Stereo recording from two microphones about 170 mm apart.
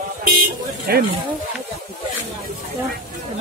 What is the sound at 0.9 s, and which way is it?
Speech, 65° right (ahead or behind).